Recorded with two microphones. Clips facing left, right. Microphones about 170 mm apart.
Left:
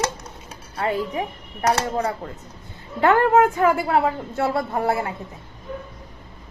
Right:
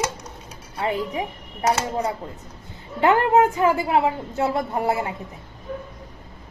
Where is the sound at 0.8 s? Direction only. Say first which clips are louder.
Left 1 dB; 15° right (ahead or behind).